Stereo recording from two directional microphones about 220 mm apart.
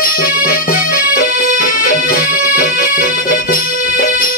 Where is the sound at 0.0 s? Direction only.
40° left (ahead or behind).